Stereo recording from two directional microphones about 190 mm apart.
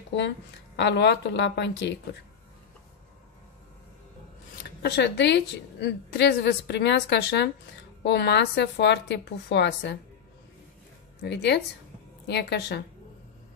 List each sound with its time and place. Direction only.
0.7 s a woman's voice: 65° left (ahead or behind)
4.8 s a woman's voice: 65° left (ahead or behind)
11.2 s a woman's voice: 65° left (ahead or behind)